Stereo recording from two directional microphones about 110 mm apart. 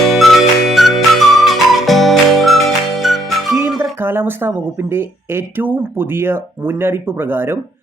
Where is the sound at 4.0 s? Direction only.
20° right (ahead or behind).